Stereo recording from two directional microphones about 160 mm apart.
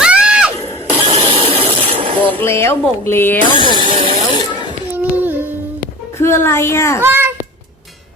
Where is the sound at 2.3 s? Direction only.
15° left (ahead or behind).